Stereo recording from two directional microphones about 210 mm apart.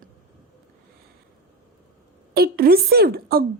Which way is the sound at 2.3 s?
45° right (ahead or behind).